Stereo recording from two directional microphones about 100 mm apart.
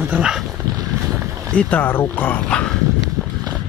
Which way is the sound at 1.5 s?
15° left (ahead or behind).